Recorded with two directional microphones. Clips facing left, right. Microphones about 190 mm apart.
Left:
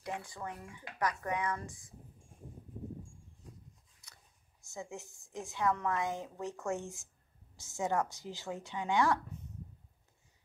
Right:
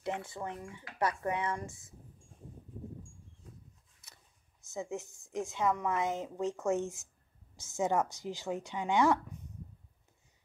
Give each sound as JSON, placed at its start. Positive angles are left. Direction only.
{"t": 0.0, "sound": "a woman's voice", "side_deg": -25}
{"t": 4.7, "sound": "a woman's voice", "side_deg": -20}